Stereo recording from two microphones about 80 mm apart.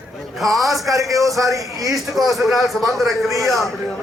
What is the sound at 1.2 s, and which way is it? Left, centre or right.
A man's voice, centre.